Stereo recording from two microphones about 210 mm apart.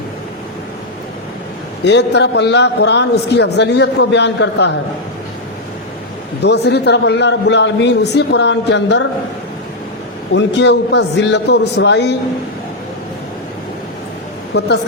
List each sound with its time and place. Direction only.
1.8 s a man's voice: 55° left (ahead or behind)
6.4 s a man's voice: 55° left (ahead or behind)
10.3 s a man's voice: 55° left (ahead or behind)
14.5 s speech: 50° left (ahead or behind)